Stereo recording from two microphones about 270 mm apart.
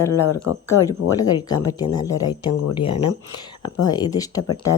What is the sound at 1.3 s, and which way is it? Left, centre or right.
Speech, centre.